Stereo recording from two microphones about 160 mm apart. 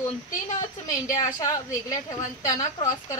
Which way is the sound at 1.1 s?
20° left (ahead or behind).